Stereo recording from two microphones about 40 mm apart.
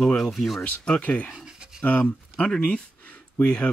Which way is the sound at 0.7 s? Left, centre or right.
Left.